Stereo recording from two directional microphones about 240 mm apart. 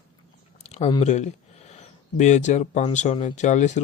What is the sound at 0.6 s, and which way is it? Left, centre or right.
Speech, left.